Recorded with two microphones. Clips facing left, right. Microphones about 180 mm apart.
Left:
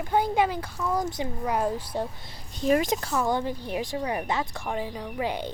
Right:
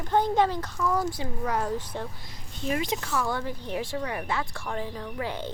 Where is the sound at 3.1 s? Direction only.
20° left (ahead or behind).